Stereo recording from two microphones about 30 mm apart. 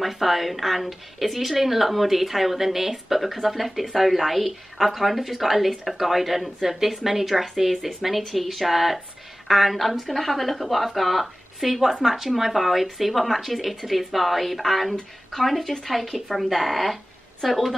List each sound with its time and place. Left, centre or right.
0.0 s speech: centre